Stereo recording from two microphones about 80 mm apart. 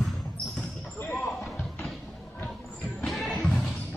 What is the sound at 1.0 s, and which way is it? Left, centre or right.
Basketball bounce, left.